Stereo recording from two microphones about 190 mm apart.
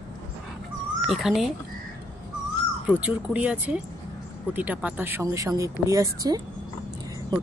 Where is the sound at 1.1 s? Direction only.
Centre (ahead or behind).